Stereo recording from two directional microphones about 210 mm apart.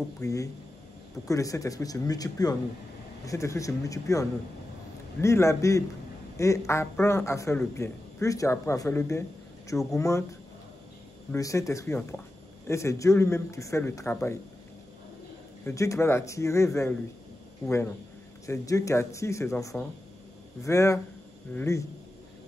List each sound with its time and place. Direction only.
0.2 s speech: 15° left (ahead or behind)
11.3 s speech: 15° left (ahead or behind)
15.6 s speech: 15° left (ahead or behind)
18.5 s speech: 15° left (ahead or behind)